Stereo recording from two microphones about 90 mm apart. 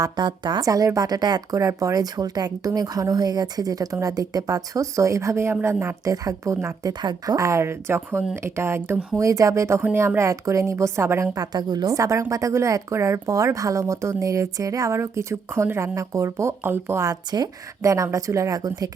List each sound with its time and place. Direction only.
0.2 s speech: 55° right (ahead or behind)
0.6 s speech: 40° right (ahead or behind)
7.0 s speech: 55° right (ahead or behind)
7.3 s speech: 35° right (ahead or behind)
11.3 s speech: 50° right (ahead or behind)
11.9 s speech: 35° right (ahead or behind)
17.3 s speech: 40° right (ahead or behind)